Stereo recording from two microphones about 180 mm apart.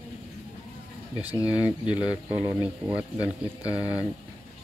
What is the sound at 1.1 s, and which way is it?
Speech, 10° right (ahead or behind).